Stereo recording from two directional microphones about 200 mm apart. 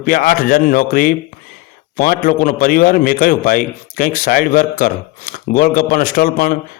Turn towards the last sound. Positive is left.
turn(degrees=45)  # may be behind; listen again after turning